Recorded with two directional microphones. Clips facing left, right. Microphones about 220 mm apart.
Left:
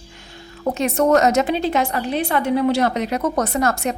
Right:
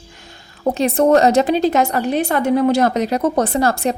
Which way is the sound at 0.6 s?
35° right (ahead or behind).